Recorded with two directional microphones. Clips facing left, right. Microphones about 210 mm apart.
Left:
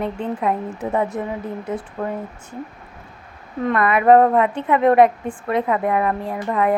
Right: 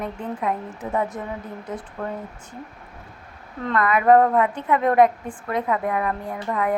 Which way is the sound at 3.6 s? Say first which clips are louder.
Left 3 dB; 20° left (ahead or behind).